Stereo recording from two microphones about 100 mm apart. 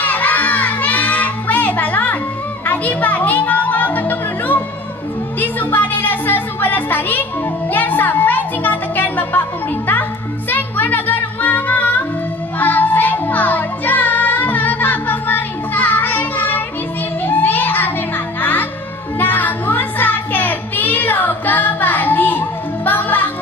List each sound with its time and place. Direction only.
0.0 s children shouting: 15° left (ahead or behind)
2.6 s music: 15° left (ahead or behind)
19.1 s child singing: 20° left (ahead or behind)
22.8 s music: 20° left (ahead or behind)